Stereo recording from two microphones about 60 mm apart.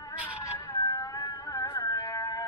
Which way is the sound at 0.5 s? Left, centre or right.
Left.